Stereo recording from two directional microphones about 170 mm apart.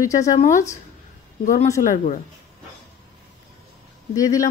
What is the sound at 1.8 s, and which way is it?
Speech, 50° left (ahead or behind).